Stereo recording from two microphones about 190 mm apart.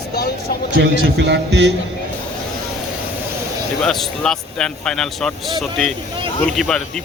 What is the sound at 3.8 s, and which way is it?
Speech, 5° left (ahead or behind).